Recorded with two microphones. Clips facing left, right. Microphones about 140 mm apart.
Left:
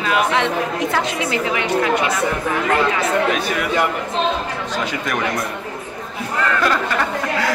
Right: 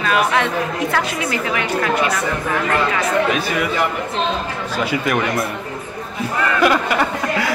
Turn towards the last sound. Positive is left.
turn(degrees=-10)  # may be behind; listen again after turning